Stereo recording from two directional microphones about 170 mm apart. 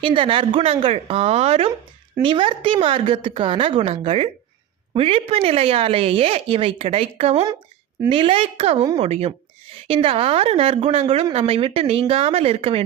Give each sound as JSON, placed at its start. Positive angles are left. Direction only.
{"t": 0.0, "sound": "a woman's voice", "side_deg": -30}